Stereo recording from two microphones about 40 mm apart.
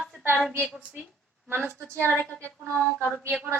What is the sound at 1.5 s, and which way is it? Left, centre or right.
Speech, right.